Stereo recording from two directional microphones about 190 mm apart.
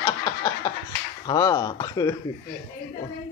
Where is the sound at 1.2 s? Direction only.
20° left (ahead or behind).